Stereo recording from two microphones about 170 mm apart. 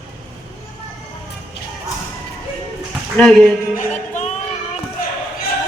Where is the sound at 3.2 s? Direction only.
5° left (ahead or behind).